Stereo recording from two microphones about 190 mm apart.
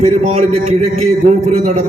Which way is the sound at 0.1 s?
35° right (ahead or behind).